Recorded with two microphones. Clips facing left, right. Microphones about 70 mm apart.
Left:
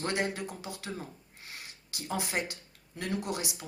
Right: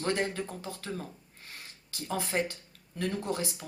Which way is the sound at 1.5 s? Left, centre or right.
Centre.